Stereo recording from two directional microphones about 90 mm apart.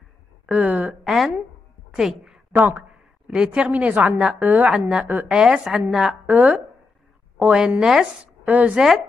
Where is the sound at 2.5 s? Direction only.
20° right (ahead or behind).